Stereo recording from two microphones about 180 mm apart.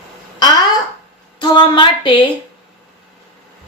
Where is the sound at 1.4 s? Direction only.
25° left (ahead or behind).